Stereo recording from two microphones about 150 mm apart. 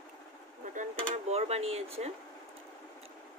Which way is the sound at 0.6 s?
60° right (ahead or behind).